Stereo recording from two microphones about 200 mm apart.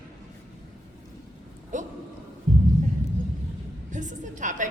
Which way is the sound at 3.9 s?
40° right (ahead or behind).